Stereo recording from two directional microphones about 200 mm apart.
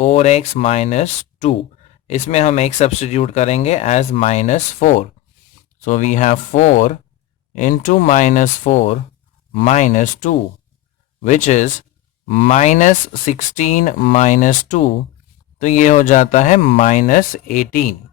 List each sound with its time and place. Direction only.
0.0 s speech: 35° left (ahead or behind)